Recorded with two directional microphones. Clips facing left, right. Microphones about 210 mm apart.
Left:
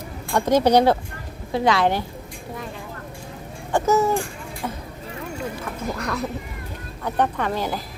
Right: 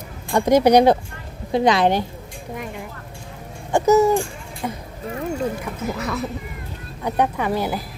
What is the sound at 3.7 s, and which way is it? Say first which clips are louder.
Speech: right 4 dB; 10° right (ahead or behind).